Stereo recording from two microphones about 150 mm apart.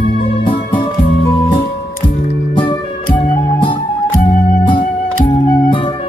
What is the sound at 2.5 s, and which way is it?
Music, 35° left (ahead or behind).